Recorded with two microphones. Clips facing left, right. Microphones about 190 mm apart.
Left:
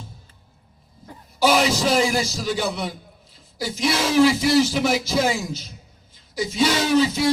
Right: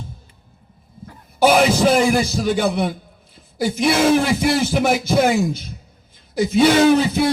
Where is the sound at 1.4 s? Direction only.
55° right (ahead or behind).